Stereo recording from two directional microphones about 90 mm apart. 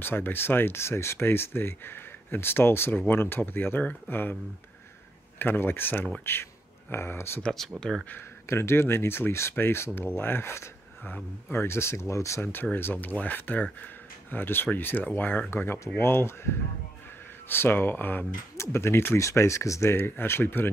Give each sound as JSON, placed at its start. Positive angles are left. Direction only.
{"t": 0.0, "sound": "speech", "side_deg": 20}
{"t": 5.4, "sound": "speech", "side_deg": 25}
{"t": 7.4, "sound": "speech", "side_deg": 5}
{"t": 8.5, "sound": "speech", "side_deg": 30}